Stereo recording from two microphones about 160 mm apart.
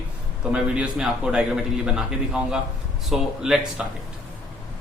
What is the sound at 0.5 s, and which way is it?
A man's voice, 5° right (ahead or behind).